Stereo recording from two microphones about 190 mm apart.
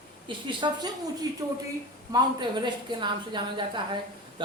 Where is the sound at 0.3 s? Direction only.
25° right (ahead or behind).